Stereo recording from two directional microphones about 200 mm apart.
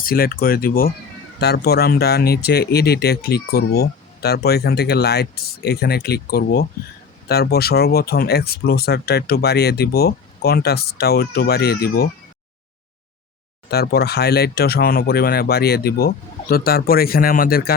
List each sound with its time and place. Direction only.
0.0 s speech: 45° left (ahead or behind)
13.7 s speech: 50° left (ahead or behind)